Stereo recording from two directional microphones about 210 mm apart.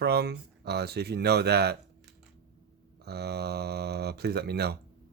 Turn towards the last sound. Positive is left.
turn(degrees=-50)  # may be behind; listen again after turning